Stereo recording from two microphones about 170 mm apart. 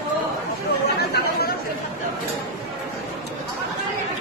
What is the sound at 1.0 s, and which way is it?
Chatter, 70° left (ahead or behind).